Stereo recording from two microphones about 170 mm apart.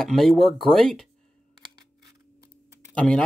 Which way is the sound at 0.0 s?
Centre (ahead or behind).